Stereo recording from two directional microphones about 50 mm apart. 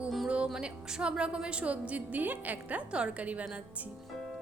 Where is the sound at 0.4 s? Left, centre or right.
Centre.